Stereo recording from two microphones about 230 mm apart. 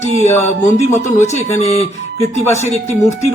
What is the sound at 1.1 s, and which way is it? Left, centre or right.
Speech, left.